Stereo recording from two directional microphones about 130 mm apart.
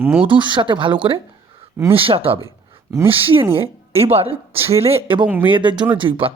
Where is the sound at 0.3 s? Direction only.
35° right (ahead or behind).